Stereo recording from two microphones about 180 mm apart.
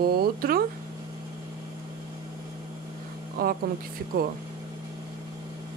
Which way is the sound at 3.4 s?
55° right (ahead or behind).